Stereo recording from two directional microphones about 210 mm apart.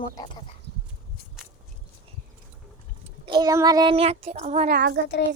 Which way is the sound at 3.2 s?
20° right (ahead or behind).